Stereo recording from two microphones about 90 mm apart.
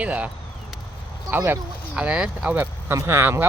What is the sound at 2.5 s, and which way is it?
Speech, 30° right (ahead or behind).